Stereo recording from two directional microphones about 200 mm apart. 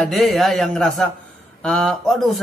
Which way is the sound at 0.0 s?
Centre (ahead or behind).